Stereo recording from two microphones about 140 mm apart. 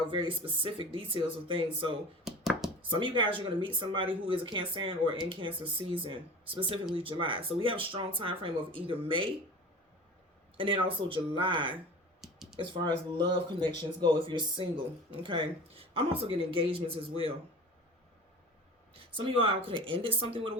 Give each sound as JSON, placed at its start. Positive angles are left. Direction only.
{"t": 0.1, "sound": "speech", "side_deg": -40}
{"t": 2.2, "sound": "a sound", "side_deg": -5}
{"t": 2.9, "sound": "speech", "side_deg": -35}
{"t": 10.6, "sound": "speech", "side_deg": -40}
{"t": 12.2, "sound": "a sound", "side_deg": 0}
{"t": 12.5, "sound": "speech", "side_deg": -35}
{"t": 19.1, "sound": "speech", "side_deg": -40}